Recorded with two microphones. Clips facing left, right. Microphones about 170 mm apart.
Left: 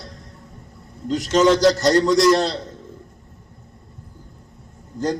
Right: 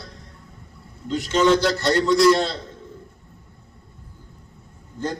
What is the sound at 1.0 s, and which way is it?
A man's voice, 45° left (ahead or behind).